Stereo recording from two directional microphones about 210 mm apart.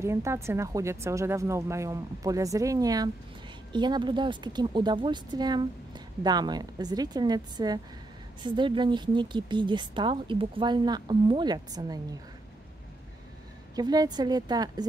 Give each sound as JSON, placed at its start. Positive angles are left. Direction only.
{"t": 0.0, "sound": "speech", "side_deg": -15}
{"t": 13.7, "sound": "speech", "side_deg": -20}